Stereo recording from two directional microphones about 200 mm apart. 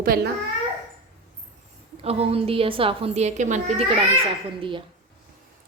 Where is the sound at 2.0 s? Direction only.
30° right (ahead or behind).